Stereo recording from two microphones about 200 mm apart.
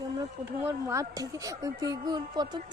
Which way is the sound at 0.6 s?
15° right (ahead or behind).